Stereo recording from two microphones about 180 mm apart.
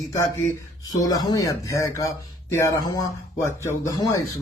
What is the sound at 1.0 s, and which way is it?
Speech, 20° left (ahead or behind).